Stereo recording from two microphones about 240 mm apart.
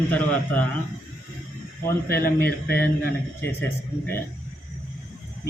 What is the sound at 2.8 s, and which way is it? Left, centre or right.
A man's voice, centre.